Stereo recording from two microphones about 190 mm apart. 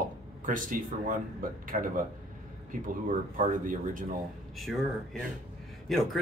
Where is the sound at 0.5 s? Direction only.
45° right (ahead or behind).